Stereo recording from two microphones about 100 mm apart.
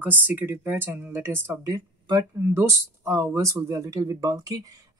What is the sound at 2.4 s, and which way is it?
Speech, 25° right (ahead or behind).